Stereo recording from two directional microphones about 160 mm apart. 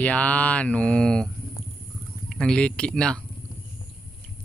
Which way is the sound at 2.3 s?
5° left (ahead or behind).